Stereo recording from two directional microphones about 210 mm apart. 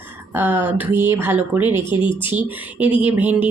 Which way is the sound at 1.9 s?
25° left (ahead or behind).